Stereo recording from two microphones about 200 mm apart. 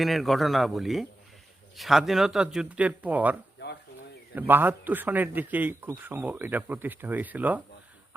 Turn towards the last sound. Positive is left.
turn(degrees=-10)  # may be behind; listen again after turning